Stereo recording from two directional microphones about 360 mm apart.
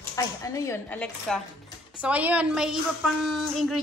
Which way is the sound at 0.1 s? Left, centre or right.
Centre.